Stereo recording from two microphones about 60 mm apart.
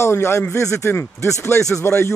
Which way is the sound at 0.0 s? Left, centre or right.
Left.